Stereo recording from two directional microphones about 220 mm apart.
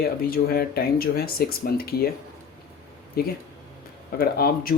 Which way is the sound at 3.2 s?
45° left (ahead or behind).